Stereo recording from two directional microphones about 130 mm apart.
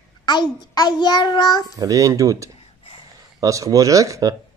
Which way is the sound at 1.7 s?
25° right (ahead or behind).